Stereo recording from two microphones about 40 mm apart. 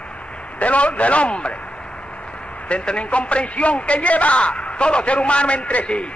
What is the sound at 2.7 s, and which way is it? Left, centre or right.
A man's voice, left.